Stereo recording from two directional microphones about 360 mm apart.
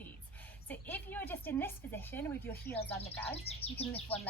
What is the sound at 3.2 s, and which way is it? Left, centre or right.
Speech, centre.